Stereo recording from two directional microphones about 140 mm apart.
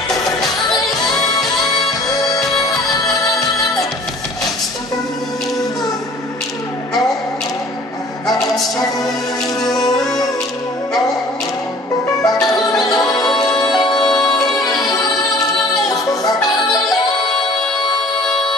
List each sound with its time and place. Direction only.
0.8 s music: centre (ahead or behind)
3.3 s music: centre (ahead or behind)
8.4 s music: centre (ahead or behind)
9.8 s music: 25° left (ahead or behind)
12.9 s music: 30° left (ahead or behind)
13.7 s music: centre (ahead or behind)
15.9 s music: 25° left (ahead or behind)